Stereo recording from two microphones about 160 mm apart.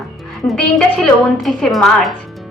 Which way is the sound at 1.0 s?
Centre (ahead or behind).